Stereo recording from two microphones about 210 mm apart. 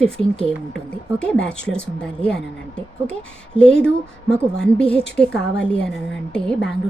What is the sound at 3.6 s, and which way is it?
A woman's voice, 5° left (ahead or behind).